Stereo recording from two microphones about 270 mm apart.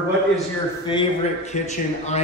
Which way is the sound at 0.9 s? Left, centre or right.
Left.